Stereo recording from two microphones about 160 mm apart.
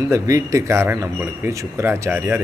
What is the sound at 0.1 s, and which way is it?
Speech, 20° right (ahead or behind).